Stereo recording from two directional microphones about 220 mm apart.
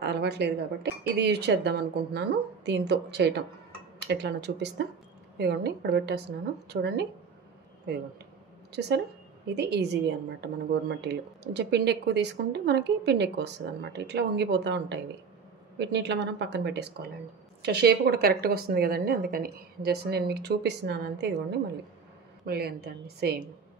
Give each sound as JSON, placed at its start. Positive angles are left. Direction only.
{"t": 0.0, "sound": "a woman's voice", "side_deg": -50}
{"t": 8.7, "sound": "a woman's voice", "side_deg": -50}